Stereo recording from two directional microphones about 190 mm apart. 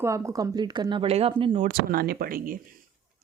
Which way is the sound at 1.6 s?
50° right (ahead or behind).